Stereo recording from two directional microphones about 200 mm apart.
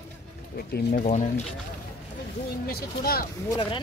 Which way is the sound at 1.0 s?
35° left (ahead or behind).